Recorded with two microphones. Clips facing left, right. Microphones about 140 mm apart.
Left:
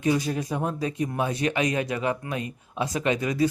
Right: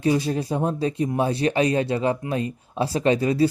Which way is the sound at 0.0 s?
30° right (ahead or behind).